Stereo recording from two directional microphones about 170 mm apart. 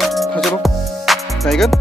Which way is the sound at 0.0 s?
Centre (ahead or behind).